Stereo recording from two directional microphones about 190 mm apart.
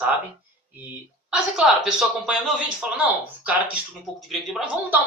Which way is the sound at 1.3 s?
5° right (ahead or behind).